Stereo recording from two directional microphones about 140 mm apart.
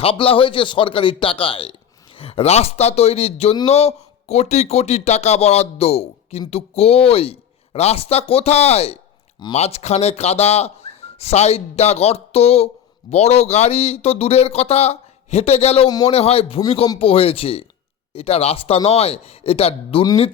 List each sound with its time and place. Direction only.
0.0 s a man's voice: 40° left (ahead or behind)